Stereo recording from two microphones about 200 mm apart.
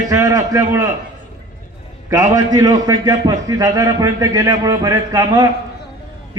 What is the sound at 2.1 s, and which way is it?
A man's voice, 15° right (ahead or behind).